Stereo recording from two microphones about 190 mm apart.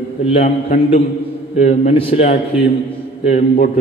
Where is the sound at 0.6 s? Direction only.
40° left (ahead or behind).